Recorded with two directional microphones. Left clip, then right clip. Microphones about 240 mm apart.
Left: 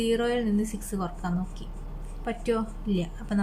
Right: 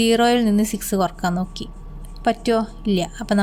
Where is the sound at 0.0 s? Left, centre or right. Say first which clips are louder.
Right 9 dB; right.